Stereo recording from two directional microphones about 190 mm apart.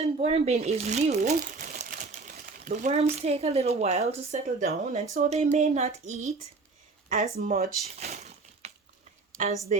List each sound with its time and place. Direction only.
0.0 s speech: 30° right (ahead or behind)
7.1 s speech: 50° right (ahead or behind)
7.9 s a sound: 35° right (ahead or behind)